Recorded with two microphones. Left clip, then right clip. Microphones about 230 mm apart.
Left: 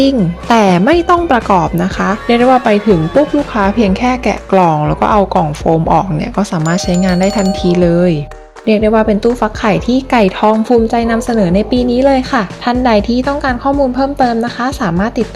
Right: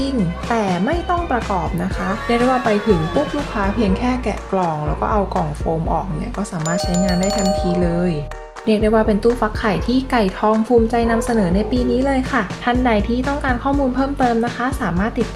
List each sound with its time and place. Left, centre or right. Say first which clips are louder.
0.0 s a woman's voice: left 10 dB; left
2.7 s speech: left 7 dB; centre
3.5 s a woman's voice: left 7 dB; left
7.2 s speech: left 5 dB; centre
7.6 s a woman's voice: left 9 dB; left
8.6 s a woman's voice: left 5 dB; left